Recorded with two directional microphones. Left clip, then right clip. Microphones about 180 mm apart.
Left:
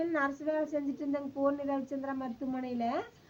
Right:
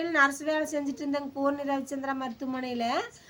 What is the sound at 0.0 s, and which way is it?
A woman's voice, 25° right (ahead or behind).